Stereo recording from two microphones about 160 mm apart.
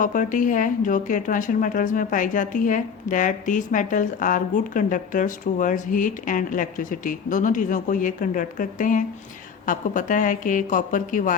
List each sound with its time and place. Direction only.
0.0 s speech: 55° left (ahead or behind)